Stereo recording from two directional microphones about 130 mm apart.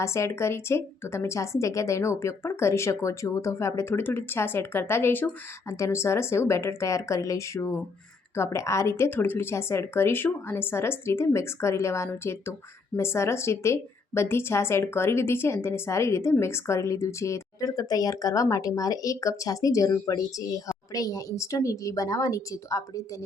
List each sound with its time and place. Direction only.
0.0 s a woman's voice: 20° left (ahead or behind)